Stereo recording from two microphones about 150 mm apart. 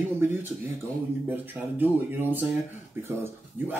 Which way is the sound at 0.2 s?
15° right (ahead or behind).